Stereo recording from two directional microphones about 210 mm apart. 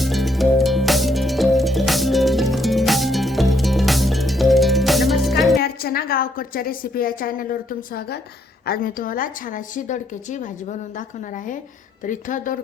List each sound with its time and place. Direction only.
0.0 s music: centre (ahead or behind)
5.5 s a woman's voice: 45° left (ahead or behind)
12.0 s a woman's voice: 40° left (ahead or behind)